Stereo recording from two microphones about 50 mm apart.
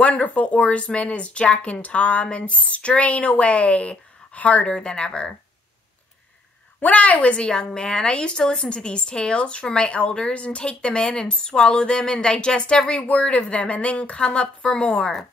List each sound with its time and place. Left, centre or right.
0.0 s a woman's voice: left
6.8 s a woman's voice: left